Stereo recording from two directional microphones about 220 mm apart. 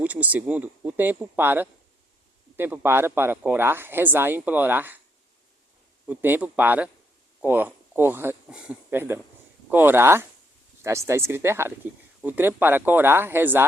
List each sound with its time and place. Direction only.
0.0 s speech: 5° right (ahead or behind)
6.1 s speech: 10° right (ahead or behind)